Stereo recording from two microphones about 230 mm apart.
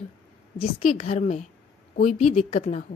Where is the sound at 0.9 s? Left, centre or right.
Left.